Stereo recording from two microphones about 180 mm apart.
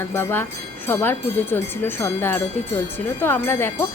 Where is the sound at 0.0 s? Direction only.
15° left (ahead or behind).